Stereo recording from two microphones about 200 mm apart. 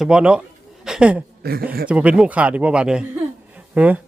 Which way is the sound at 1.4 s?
50° right (ahead or behind).